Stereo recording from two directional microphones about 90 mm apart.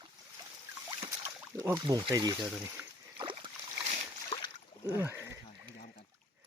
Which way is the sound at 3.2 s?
70° right (ahead or behind).